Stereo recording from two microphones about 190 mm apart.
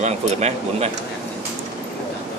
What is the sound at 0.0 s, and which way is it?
Speech, 35° right (ahead or behind).